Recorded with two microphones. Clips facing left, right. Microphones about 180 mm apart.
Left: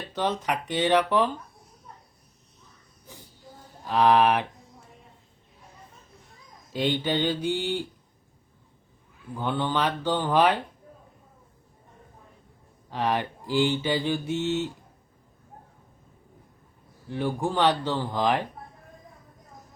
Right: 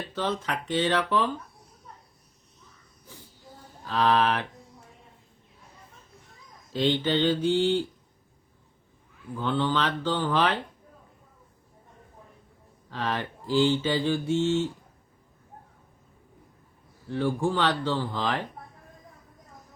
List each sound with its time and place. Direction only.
0.1 s speech: 15° left (ahead or behind)
3.8 s speech: 15° left (ahead or behind)
6.7 s speech: 15° left (ahead or behind)
9.4 s speech: 10° left (ahead or behind)
12.9 s speech: 15° left (ahead or behind)
17.1 s speech: 15° left (ahead or behind)